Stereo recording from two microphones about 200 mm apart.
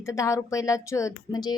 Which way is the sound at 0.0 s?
15° left (ahead or behind).